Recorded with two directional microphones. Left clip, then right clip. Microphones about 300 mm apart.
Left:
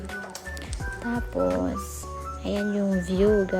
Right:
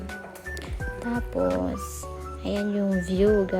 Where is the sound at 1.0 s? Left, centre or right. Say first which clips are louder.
Even; centre.